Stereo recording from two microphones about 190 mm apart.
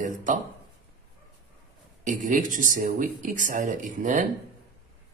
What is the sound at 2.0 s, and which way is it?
Speech, 40° right (ahead or behind).